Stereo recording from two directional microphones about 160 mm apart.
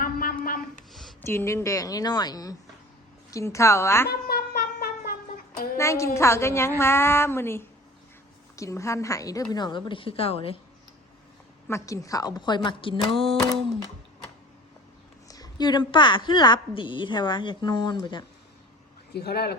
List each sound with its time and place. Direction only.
0.0 s a sound: 60° left (ahead or behind)
1.2 s a woman's voice: 15° left (ahead or behind)
4.1 s a sound: 75° left (ahead or behind)
5.7 s a woman's voice: 20° left (ahead or behind); by 10.6 s 35° left (ahead or behind)
11.7 s a woman's voice: 20° left (ahead or behind)
15.3 s a woman's voice: 25° left (ahead or behind)
19.1 s speech: 90° left